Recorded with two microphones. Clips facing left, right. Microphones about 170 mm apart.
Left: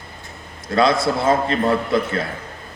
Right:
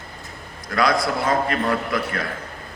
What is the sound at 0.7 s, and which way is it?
A man's voice, 25° left (ahead or behind).